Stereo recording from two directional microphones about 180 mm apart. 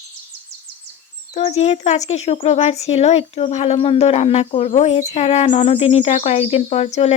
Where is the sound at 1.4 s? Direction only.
35° left (ahead or behind).